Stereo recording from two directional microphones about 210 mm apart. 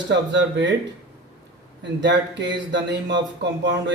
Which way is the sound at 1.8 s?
60° right (ahead or behind).